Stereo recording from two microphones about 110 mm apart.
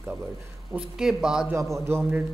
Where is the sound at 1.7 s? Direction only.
25° right (ahead or behind).